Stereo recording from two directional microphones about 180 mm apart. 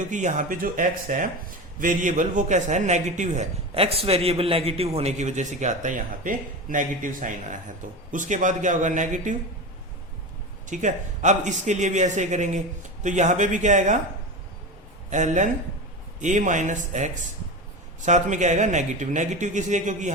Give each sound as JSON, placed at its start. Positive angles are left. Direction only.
{"t": 0.1, "sound": "a man's voice", "side_deg": -45}
{"t": 10.7, "sound": "a man's voice", "side_deg": -45}
{"t": 15.1, "sound": "a man's voice", "side_deg": -45}